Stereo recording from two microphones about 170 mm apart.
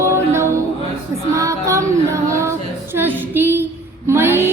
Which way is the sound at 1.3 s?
20° right (ahead or behind).